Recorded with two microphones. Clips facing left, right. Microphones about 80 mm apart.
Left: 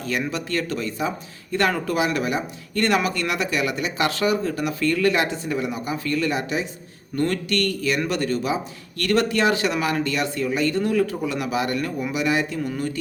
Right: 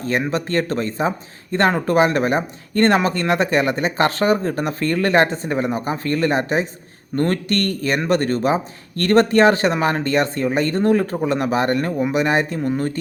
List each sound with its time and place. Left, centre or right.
0.0 s speech: right